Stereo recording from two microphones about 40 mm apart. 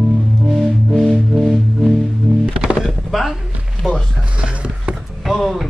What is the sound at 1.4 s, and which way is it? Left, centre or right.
Music, centre.